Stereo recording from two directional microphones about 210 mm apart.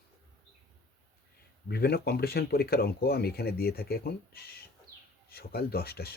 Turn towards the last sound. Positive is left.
turn(degrees=50)  # may be behind; listen again after turning